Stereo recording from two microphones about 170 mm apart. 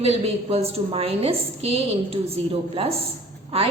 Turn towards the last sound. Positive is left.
turn(degrees=-35)  # may be behind; listen again after turning